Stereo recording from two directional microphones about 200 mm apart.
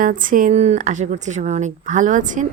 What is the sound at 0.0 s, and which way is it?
A woman's voice, 45° right (ahead or behind).